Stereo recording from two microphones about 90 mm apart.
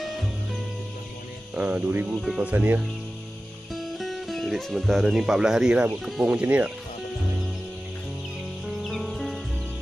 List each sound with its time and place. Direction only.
1.5 s speech: 15° right (ahead or behind)
2.2 s speech: 10° right (ahead or behind)
2.5 s speech: 20° right (ahead or behind)
3.7 s speech: centre (ahead or behind)
8.8 s music: centre (ahead or behind)